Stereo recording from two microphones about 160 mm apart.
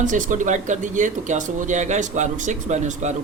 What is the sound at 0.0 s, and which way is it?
Speech, 50° right (ahead or behind).